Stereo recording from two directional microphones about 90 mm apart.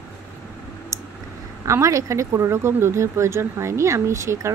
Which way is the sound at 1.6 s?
35° right (ahead or behind).